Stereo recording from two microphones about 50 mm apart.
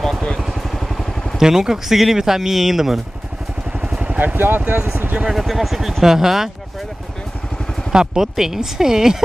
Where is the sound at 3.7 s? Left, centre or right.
Centre.